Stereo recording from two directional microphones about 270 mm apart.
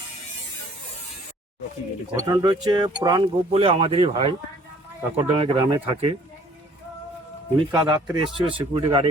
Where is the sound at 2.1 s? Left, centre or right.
Centre.